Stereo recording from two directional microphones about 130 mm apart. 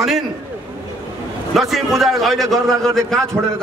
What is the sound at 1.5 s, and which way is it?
A man's voice, centre (ahead or behind).